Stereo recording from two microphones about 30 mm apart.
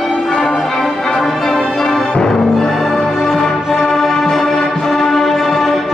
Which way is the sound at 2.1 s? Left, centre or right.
Left.